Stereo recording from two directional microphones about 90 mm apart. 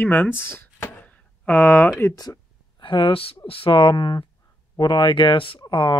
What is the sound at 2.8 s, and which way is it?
Speech, 70° left (ahead or behind).